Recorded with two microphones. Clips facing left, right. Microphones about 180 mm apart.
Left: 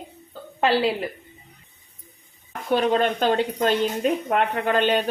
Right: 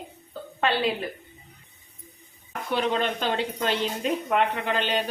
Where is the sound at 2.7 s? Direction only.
45° left (ahead or behind).